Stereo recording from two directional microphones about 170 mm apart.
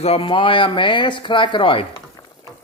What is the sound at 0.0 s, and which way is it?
Speech, 35° left (ahead or behind).